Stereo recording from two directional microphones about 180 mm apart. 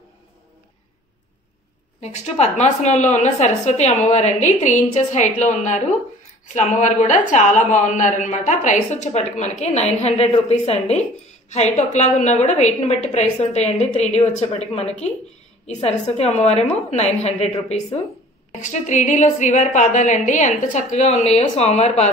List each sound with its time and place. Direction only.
2.0 s a woman's voice: 40° left (ahead or behind)